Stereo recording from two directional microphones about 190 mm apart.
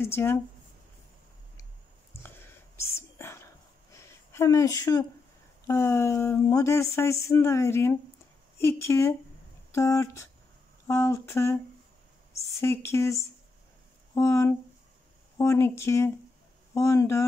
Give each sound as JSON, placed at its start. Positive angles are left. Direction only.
{"t": 0.0, "sound": "speech", "side_deg": 15}
{"t": 2.8, "sound": "whispering", "side_deg": 15}
{"t": 3.9, "sound": "a sound", "side_deg": 15}
{"t": 5.7, "sound": "speech", "side_deg": 15}